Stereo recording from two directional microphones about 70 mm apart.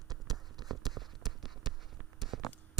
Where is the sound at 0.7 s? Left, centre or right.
Centre.